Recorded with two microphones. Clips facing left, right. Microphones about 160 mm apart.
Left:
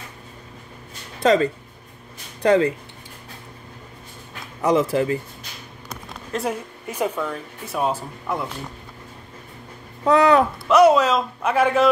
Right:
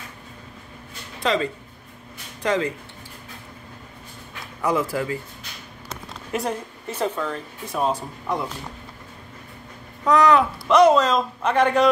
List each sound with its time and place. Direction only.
1.2 s speech: 40° left (ahead or behind)
4.6 s speech: 20° left (ahead or behind)
6.3 s speech: 10° right (ahead or behind)
6.9 s speech: 10° left (ahead or behind)
10.0 s speech: 30° left (ahead or behind)
10.7 s a man's voice: 5° left (ahead or behind)